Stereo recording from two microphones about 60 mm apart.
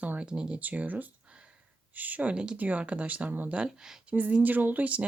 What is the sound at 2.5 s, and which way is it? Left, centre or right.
Speech, right.